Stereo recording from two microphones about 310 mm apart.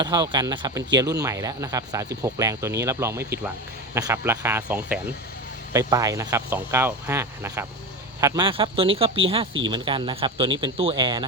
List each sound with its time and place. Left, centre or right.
0.0 s speech: centre